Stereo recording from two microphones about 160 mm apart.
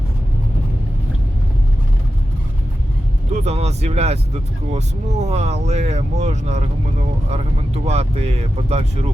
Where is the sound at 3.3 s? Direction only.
45° right (ahead or behind).